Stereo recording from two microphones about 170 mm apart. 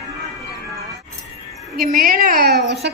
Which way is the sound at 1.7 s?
60° right (ahead or behind).